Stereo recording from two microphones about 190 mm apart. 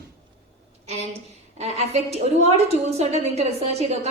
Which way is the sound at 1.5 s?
35° right (ahead or behind).